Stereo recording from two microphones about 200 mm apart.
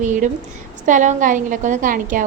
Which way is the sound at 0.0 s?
40° right (ahead or behind).